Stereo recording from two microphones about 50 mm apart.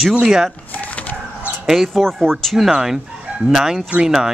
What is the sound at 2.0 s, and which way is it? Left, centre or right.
Speech, centre.